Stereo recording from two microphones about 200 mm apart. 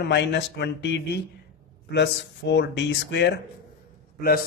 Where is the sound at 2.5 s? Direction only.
60° left (ahead or behind).